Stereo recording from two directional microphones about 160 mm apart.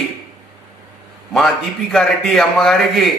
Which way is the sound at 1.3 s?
Centre (ahead or behind).